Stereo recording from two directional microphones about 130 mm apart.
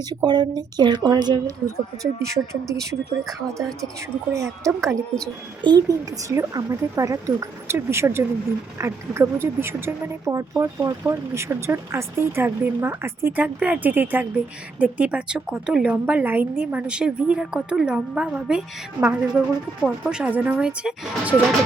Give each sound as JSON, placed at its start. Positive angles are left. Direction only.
{"t": 0.1, "sound": "speech", "side_deg": -35}
{"t": 3.0, "sound": "speech", "side_deg": 0}
{"t": 4.3, "sound": "speech", "side_deg": -25}
{"t": 4.8, "sound": "speech", "side_deg": 5}
{"t": 5.6, "sound": "a woman's voice", "side_deg": -30}